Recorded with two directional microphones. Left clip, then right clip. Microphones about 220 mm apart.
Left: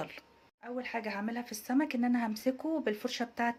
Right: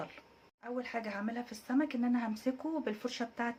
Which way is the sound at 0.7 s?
15° left (ahead or behind).